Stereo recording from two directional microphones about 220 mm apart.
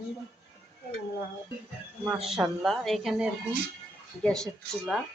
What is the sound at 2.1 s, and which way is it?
Speech, centre (ahead or behind).